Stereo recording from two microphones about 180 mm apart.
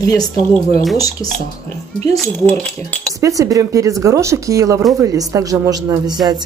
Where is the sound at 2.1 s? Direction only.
Centre (ahead or behind).